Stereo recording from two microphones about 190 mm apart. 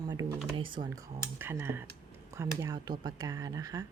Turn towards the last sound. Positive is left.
turn(degrees=-20)  # may be behind; listen again after turning